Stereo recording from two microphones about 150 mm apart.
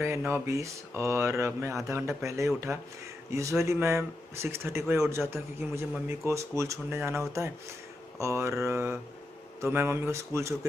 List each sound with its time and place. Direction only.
0.0 s speech: 15° right (ahead or behind)